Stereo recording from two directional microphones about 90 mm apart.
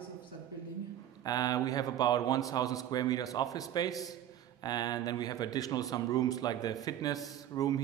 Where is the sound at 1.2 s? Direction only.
45° left (ahead or behind).